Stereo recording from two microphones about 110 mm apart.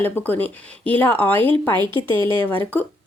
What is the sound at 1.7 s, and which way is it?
Speech, 45° right (ahead or behind).